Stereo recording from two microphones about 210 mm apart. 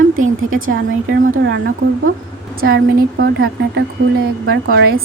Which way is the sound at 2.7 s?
55° right (ahead or behind).